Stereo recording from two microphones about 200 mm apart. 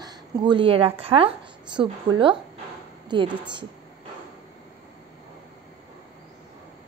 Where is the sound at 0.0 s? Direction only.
20° right (ahead or behind).